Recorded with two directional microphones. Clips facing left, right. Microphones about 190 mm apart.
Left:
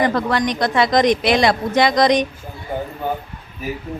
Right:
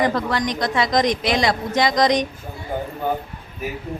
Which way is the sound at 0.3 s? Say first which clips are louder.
Left 3 dB; 65° left (ahead or behind).